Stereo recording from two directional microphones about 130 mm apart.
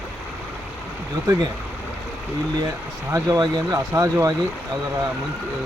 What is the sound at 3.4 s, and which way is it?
Speech, 25° right (ahead or behind).